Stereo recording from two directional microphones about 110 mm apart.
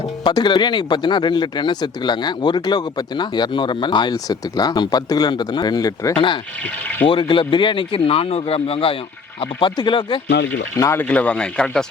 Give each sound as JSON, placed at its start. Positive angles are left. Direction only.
{"t": 0.3, "sound": "speech", "side_deg": 45}
{"t": 6.1, "sound": "a man's voice", "side_deg": 50}
{"t": 9.4, "sound": "speech", "side_deg": 50}
{"t": 10.8, "sound": "speech", "side_deg": 30}
{"t": 11.1, "sound": "speech", "side_deg": 10}